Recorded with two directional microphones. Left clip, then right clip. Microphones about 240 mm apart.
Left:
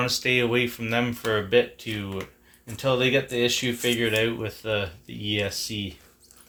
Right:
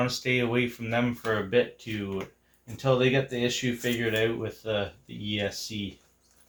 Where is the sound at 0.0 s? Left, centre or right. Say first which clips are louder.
Left 4 dB; left.